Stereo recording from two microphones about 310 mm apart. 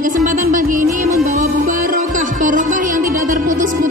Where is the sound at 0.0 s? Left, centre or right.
Right.